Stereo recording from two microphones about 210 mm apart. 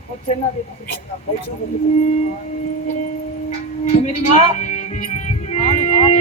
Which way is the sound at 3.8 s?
35° left (ahead or behind).